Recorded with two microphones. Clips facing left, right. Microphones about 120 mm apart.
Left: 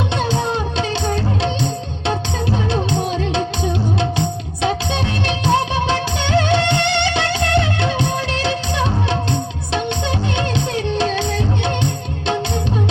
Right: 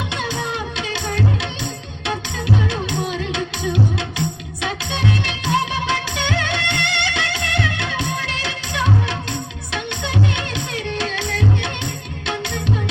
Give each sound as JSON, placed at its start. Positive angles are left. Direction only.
{"t": 0.2, "sound": "music", "side_deg": 30}
{"t": 2.9, "sound": "music", "side_deg": 30}
{"t": 5.5, "sound": "music", "side_deg": 25}
{"t": 10.3, "sound": "music", "side_deg": 25}